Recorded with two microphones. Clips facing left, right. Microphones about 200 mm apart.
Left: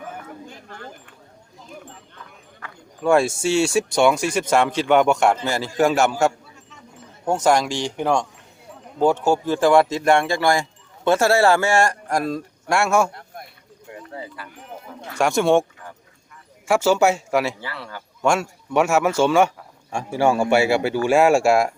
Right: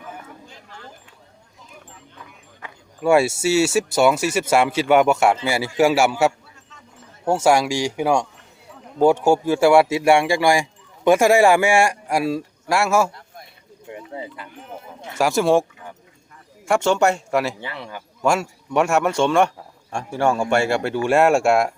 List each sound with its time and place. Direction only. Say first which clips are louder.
0.4 s a sound: left 4 dB; 55° left (ahead or behind)
2.6 s speech: right 1 dB; 20° right (ahead or behind)
3.0 s speech: right 1 dB; 10° right (ahead or behind)
14.1 s speech: right 1 dB; 20° right (ahead or behind)
15.2 s a man's voice: even; centre (ahead or behind)
16.6 s a man's voice: left 1 dB; 5° left (ahead or behind)
17.6 s speech: right 1 dB; 20° right (ahead or behind)
18.2 s a man's voice: even; centre (ahead or behind)